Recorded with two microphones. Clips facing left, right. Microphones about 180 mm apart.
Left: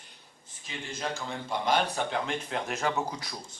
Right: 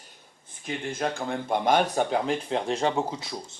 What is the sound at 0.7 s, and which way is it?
Speech, 55° right (ahead or behind).